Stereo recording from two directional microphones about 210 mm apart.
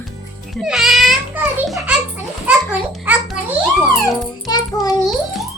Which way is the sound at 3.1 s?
10° right (ahead or behind).